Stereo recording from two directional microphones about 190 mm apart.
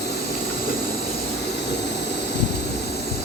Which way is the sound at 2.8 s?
60° left (ahead or behind).